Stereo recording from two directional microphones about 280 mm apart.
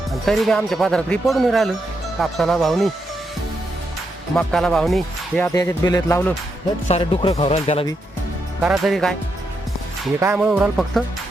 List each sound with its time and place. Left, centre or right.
0.1 s speech: centre
4.4 s speech: centre
5.5 s speech: centre
6.8 s speech: left
8.6 s speech: centre
10.2 s speech: centre